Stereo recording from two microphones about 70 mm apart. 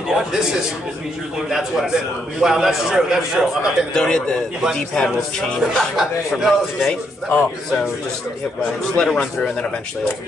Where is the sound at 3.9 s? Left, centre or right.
Centre.